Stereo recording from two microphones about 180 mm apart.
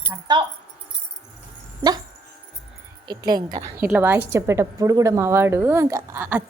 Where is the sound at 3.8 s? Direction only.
10° right (ahead or behind).